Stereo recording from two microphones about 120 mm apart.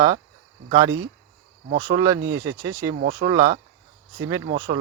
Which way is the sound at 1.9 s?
30° right (ahead or behind).